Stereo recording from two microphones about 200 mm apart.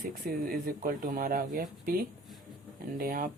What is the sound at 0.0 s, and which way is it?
Speech, 50° right (ahead or behind).